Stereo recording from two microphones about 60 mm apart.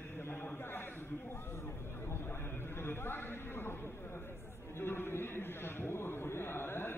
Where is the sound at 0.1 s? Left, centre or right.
Left.